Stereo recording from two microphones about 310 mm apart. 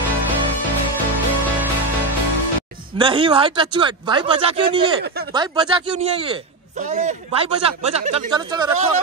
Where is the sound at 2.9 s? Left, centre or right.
Centre.